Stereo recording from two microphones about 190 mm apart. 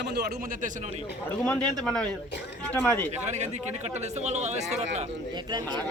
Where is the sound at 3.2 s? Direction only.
35° right (ahead or behind).